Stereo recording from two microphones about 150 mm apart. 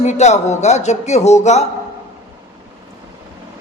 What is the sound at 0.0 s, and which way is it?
A man's voice, 50° left (ahead or behind).